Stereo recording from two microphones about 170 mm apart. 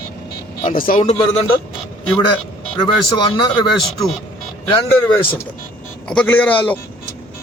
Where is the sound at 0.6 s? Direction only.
55° left (ahead or behind).